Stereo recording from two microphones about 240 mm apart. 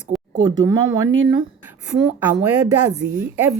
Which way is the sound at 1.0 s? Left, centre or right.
Right.